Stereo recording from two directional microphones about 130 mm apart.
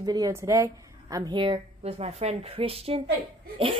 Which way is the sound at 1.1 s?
35° right (ahead or behind).